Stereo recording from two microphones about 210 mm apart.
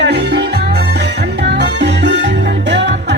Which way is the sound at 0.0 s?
50° right (ahead or behind).